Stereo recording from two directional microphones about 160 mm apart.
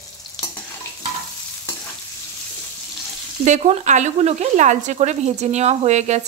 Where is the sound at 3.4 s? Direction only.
50° right (ahead or behind).